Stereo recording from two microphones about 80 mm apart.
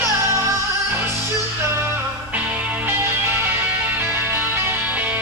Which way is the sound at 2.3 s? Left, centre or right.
Centre.